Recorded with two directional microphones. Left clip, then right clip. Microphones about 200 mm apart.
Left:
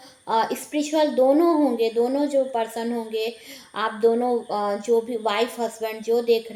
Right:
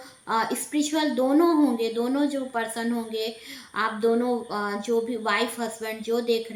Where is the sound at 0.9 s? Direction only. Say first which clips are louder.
Left 5 dB; 15° right (ahead or behind).